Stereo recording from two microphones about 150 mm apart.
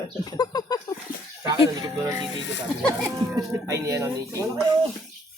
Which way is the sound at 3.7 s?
20° right (ahead or behind).